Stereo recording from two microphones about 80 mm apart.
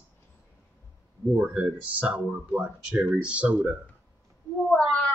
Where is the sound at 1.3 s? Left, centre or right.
Centre.